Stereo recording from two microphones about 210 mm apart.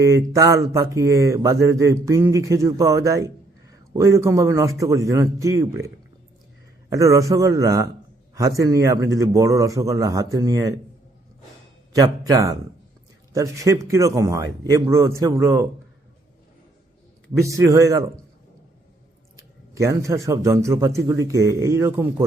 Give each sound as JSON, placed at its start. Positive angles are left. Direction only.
{"t": 0.0, "sound": "a man's voice", "side_deg": -15}
{"t": 6.9, "sound": "a man's voice", "side_deg": -15}
{"t": 11.9, "sound": "a man's voice", "side_deg": -15}
{"t": 17.4, "sound": "a man's voice", "side_deg": -15}
{"t": 19.7, "sound": "a man's voice", "side_deg": -15}